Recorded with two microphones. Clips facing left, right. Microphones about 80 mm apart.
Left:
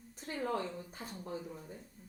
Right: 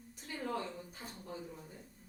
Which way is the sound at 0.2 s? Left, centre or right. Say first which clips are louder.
Left 3 dB; left.